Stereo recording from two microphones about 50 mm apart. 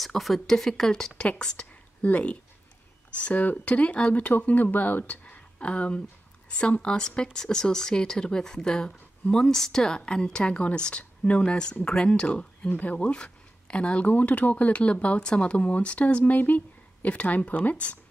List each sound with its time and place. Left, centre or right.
0.0 s speech: centre
2.0 s speech: left
12.6 s speech: left